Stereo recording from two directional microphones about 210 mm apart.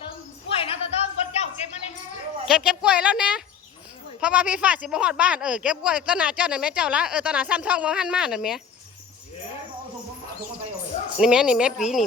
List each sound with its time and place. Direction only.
0.5 s a sound: 30° left (ahead or behind)
2.5 s speech: 5° right (ahead or behind)
11.2 s speech: 5° right (ahead or behind)